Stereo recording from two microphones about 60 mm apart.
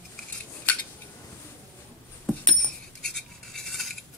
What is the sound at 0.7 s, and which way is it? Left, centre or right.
Cutlery, left.